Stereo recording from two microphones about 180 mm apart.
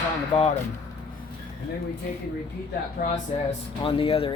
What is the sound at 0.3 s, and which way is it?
Speech, 30° left (ahead or behind).